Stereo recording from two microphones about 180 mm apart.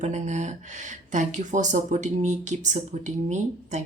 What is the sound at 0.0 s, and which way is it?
Speech, 40° right (ahead or behind).